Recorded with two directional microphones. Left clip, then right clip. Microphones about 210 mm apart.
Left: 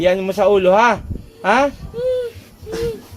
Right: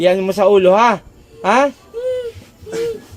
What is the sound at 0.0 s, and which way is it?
Speech, 35° right (ahead or behind).